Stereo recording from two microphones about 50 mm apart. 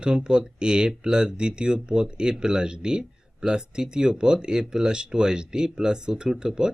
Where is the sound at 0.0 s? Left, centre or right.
Centre.